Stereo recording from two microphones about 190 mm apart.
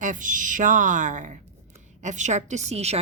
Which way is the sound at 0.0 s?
45° right (ahead or behind).